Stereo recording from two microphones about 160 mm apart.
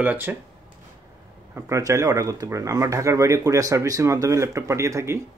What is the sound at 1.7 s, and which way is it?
Speech, 20° right (ahead or behind).